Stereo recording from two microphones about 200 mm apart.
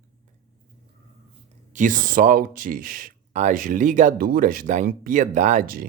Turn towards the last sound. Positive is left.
turn(degrees=-45)  # may be behind; listen again after turning